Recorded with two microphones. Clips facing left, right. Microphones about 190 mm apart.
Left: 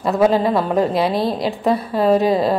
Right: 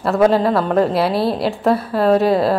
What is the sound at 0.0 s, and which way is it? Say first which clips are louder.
A woman's voice: right 1 dB; centre (ahead or behind).